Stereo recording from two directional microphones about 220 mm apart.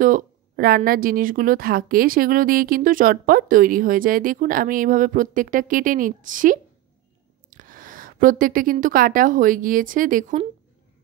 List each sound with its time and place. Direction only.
0.0 s a woman's voice: 40° right (ahead or behind)